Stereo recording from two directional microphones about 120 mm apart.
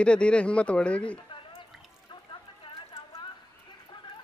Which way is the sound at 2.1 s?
40° left (ahead or behind).